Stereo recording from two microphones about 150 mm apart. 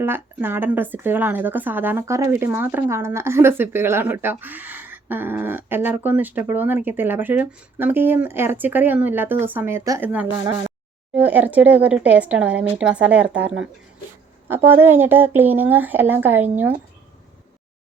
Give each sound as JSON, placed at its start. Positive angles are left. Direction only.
{"t": 0.0, "sound": "speech", "side_deg": -15}
{"t": 11.1, "sound": "speech", "side_deg": -10}